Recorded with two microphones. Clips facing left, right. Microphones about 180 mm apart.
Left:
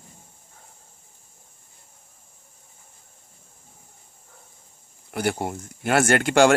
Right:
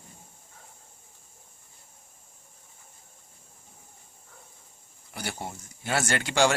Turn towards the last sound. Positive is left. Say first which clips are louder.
# left 7 dB
turn(degrees=55)  # may be behind; listen again after turning